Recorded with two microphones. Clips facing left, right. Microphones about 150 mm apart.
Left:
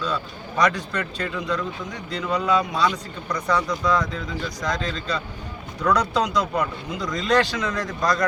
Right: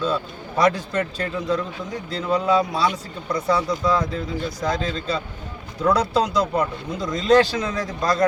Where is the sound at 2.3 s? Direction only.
25° right (ahead or behind).